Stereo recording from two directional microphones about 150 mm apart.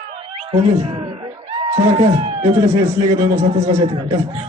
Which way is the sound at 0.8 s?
45° right (ahead or behind).